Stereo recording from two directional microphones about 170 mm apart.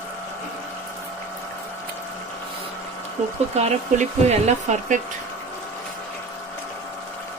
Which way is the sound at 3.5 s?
40° right (ahead or behind).